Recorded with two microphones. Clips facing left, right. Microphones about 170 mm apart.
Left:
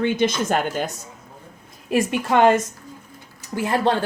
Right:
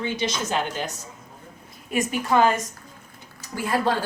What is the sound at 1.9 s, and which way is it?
Speech, 75° left (ahead or behind).